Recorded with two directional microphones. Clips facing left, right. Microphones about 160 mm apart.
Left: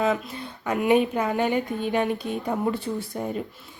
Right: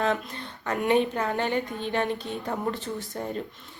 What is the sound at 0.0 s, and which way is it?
Speech, 10° left (ahead or behind).